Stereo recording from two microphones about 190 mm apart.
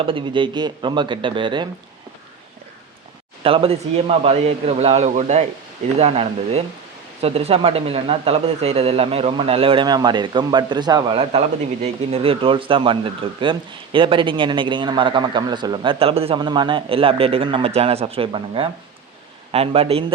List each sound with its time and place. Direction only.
0.0 s speech: 25° right (ahead or behind)
3.4 s a man's voice: 30° right (ahead or behind)